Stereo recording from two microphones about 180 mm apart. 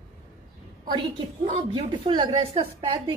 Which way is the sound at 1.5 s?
35° right (ahead or behind).